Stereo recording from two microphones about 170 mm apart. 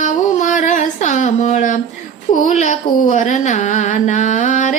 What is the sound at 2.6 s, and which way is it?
Speech, 45° left (ahead or behind).